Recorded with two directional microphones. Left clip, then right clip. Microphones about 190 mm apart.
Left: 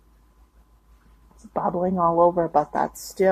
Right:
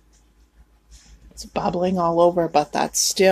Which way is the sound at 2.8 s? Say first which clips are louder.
Right 8 dB; 30° right (ahead or behind).